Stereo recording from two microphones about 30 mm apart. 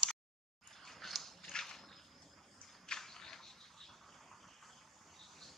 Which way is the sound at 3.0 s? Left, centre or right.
Centre.